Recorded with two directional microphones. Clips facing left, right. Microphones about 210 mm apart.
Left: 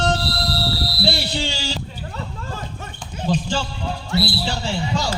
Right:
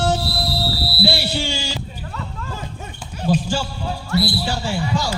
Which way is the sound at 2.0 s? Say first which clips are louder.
Even; 30° left (ahead or behind).